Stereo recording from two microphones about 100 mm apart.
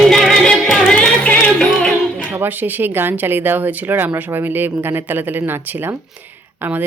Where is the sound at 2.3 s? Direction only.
20° right (ahead or behind).